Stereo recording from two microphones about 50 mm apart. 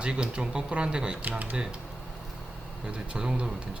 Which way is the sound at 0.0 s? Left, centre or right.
Centre.